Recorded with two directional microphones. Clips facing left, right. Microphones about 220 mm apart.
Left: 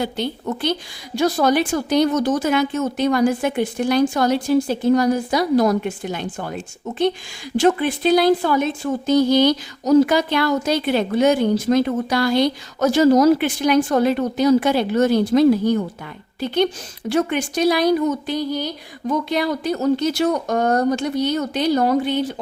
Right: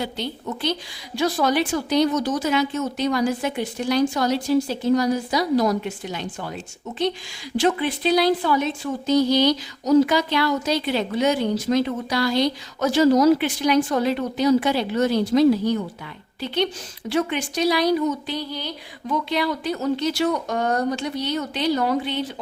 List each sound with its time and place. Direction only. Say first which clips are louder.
0.0 s speech: left 5 dB; 50° left (ahead or behind)
17.1 s speech: left 3 dB; 50° left (ahead or behind)